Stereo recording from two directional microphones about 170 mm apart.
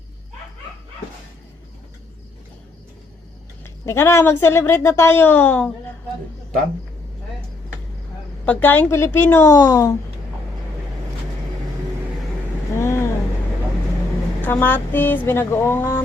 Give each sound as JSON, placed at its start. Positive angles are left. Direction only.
{"t": 3.6, "sound": "speech", "side_deg": 15}
{"t": 8.4, "sound": "speech", "side_deg": 10}
{"t": 12.7, "sound": "vehicle", "side_deg": 15}
{"t": 14.4, "sound": "speech", "side_deg": 10}